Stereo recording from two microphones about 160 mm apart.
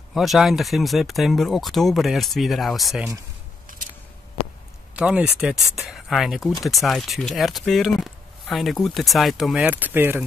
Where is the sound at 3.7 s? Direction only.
60° right (ahead or behind).